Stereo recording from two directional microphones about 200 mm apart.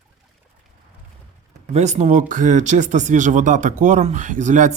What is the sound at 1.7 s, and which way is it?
Speech, 35° right (ahead or behind).